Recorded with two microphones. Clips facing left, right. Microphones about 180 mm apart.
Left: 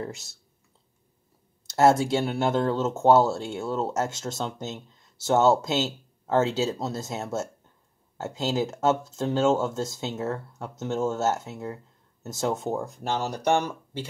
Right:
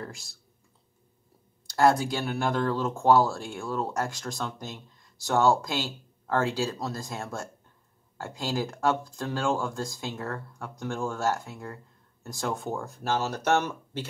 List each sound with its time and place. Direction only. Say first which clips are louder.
0.0 s speech: left 5 dB; 25° left (ahead or behind)
1.7 s speech: left 3 dB; 25° left (ahead or behind)